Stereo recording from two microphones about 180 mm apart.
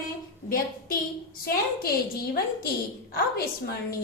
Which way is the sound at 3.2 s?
60° left (ahead or behind).